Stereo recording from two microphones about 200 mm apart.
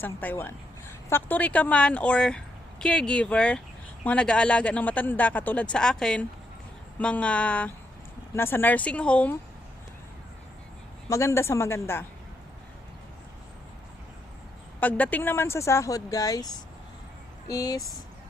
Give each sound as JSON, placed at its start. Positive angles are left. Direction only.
{"t": 0.0, "sound": "a woman's voice", "side_deg": 10}
{"t": 11.1, "sound": "speech", "side_deg": 15}
{"t": 14.8, "sound": "speech", "side_deg": 10}
{"t": 17.5, "sound": "speech", "side_deg": 15}